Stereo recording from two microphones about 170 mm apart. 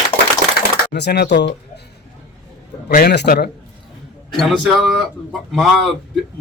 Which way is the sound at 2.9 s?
65° left (ahead or behind).